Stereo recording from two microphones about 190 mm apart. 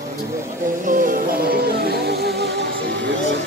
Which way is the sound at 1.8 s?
55° right (ahead or behind).